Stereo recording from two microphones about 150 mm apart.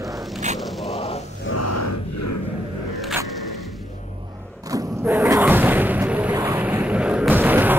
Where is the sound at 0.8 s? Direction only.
40° left (ahead or behind).